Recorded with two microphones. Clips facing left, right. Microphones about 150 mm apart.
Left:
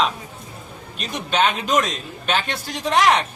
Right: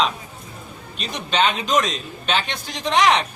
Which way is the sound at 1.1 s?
5° left (ahead or behind).